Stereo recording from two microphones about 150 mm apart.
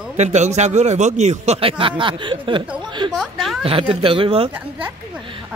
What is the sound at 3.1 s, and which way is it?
Speech, centre (ahead or behind).